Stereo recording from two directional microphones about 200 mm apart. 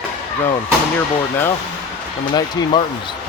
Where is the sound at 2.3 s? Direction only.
20° left (ahead or behind).